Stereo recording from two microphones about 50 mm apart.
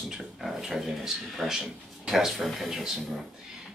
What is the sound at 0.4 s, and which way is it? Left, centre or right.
Speech, centre.